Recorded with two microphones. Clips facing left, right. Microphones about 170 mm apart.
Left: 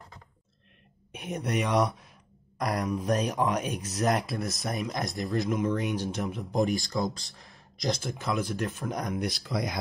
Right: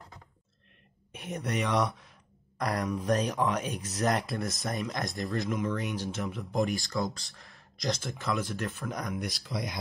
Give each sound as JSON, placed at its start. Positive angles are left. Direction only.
{"t": 1.1, "sound": "speech", "side_deg": 20}
{"t": 4.1, "sound": "speech", "side_deg": 0}
{"t": 4.6, "sound": "speech", "side_deg": 20}
{"t": 9.4, "sound": "speech", "side_deg": 85}